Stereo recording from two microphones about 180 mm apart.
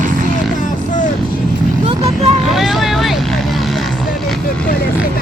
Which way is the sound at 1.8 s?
35° right (ahead or behind).